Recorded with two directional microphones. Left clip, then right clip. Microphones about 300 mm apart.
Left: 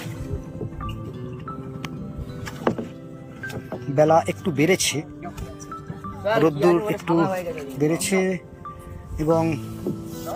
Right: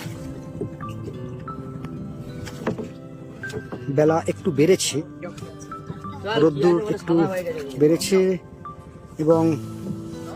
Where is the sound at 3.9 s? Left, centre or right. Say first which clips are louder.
Left 2 dB; centre.